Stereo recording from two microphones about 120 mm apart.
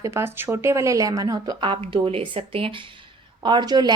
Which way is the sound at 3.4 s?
40° right (ahead or behind).